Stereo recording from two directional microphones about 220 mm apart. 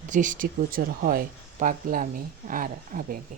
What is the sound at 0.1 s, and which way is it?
Speech, 35° right (ahead or behind).